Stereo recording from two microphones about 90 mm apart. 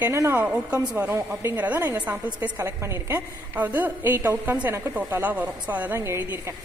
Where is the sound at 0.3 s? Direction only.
20° right (ahead or behind).